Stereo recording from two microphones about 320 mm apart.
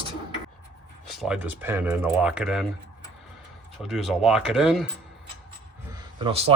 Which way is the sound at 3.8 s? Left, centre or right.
Centre.